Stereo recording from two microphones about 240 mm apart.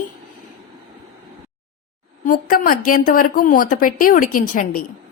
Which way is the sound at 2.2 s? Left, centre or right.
Left.